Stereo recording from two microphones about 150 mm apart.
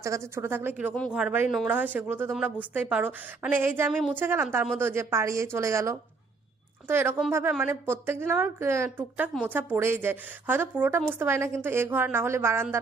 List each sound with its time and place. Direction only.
0.0 s a woman's voice: 20° right (ahead or behind)